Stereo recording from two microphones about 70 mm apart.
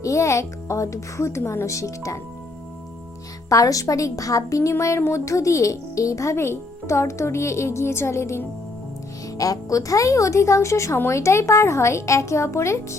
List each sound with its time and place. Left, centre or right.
0.0 s speech: left
3.5 s speech: left
9.4 s speech: left